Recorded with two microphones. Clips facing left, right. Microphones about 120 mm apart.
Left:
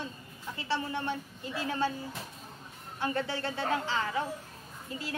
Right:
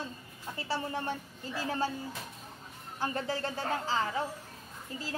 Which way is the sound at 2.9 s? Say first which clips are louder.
Left 1 dB; 35° right (ahead or behind).